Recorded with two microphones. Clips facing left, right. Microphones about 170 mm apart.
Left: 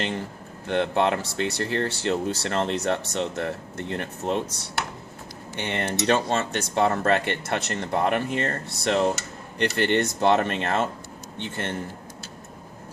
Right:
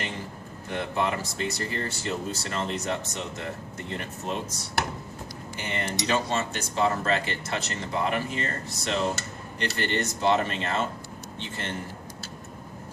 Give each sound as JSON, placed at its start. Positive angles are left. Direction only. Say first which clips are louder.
{"t": 0.7, "sound": "speech", "louder": "left 6 dB", "side_deg": 70}
{"t": 5.5, "sound": "speech", "louder": "left 4 dB", "side_deg": 70}